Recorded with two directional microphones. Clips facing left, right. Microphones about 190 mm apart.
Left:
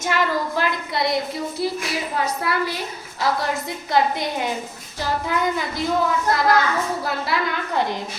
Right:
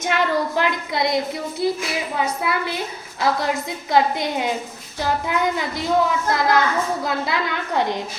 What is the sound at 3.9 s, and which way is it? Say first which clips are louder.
A woman's voice: right 2 dB; 20° right (ahead or behind).